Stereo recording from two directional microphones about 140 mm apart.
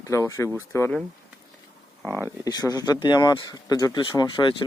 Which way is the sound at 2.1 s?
20° left (ahead or behind).